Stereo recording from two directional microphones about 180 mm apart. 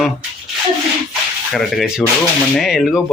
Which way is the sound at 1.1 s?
Centre (ahead or behind).